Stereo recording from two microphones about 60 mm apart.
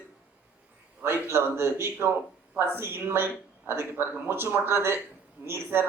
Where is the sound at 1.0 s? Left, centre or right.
Right.